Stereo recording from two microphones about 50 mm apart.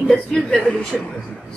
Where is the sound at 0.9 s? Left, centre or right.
Centre.